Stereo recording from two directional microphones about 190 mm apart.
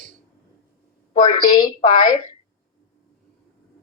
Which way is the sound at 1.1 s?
30° left (ahead or behind).